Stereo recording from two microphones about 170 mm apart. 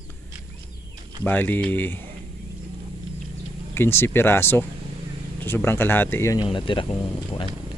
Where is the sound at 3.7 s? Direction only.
15° left (ahead or behind).